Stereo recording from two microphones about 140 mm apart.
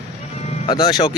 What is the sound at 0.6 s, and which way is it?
Speech, 35° left (ahead or behind).